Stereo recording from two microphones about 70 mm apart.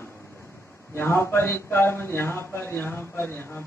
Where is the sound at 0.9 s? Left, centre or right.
Left.